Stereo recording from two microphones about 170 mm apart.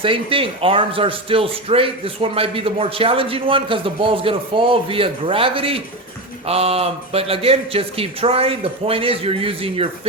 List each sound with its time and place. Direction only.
0.0 s a man's voice: 30° right (ahead or behind)